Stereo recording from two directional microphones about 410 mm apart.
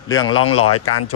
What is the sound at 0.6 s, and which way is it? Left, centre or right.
Speech, left.